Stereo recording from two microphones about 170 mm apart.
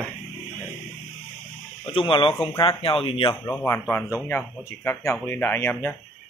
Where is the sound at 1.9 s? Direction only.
30° left (ahead or behind).